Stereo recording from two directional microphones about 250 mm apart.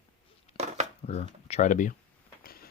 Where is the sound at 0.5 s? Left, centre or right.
Right.